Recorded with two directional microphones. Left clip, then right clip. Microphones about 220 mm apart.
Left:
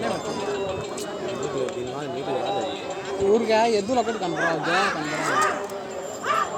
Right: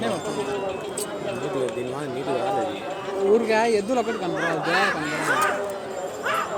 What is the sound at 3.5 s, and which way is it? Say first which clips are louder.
Speech: left 1 dB; 10° left (ahead or behind).